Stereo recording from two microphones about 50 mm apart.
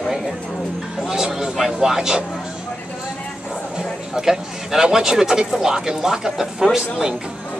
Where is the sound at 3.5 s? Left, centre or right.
Centre.